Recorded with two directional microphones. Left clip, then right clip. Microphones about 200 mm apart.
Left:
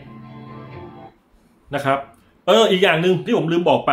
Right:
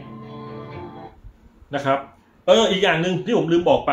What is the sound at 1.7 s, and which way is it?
Speech, 35° left (ahead or behind).